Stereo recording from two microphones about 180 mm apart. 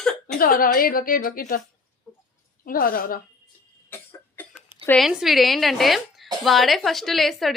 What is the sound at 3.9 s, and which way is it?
Cough, 10° left (ahead or behind).